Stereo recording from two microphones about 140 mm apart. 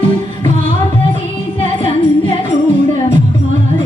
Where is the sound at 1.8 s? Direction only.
40° left (ahead or behind).